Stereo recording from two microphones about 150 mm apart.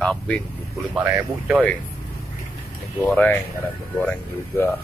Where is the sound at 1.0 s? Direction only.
5° right (ahead or behind).